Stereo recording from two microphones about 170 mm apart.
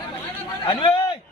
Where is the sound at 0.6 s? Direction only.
30° left (ahead or behind).